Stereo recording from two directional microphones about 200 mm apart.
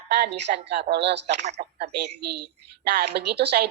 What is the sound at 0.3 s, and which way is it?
Speech, 60° right (ahead or behind).